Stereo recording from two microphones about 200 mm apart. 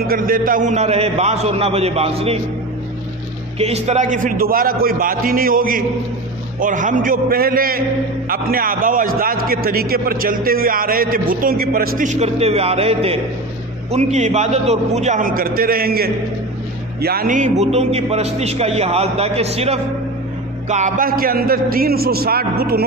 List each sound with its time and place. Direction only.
0.0 s a man's voice: 45° right (ahead or behind); by 2.4 s 30° right (ahead or behind)
3.5 s a man's voice: 30° right (ahead or behind); by 22.8 s 50° right (ahead or behind)